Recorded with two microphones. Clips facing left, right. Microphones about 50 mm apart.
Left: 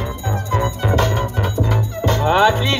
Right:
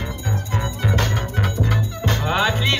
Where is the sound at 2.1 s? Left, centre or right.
Left.